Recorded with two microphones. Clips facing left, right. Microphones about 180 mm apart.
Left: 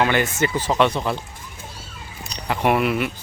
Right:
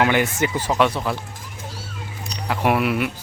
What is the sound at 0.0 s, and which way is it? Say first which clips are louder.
Speech: right 1 dB; 15° right (ahead or behind).